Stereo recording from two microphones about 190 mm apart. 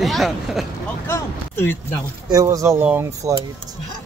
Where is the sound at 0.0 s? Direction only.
Centre (ahead or behind).